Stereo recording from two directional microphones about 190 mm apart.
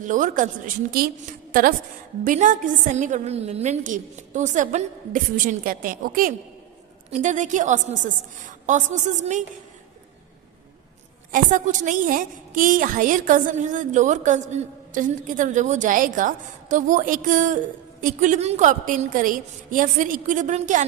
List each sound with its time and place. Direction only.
0.0 s a woman's voice: 45° right (ahead or behind)
2.2 s a woman's voice: 40° right (ahead or behind)
11.3 s a woman's voice: 45° right (ahead or behind)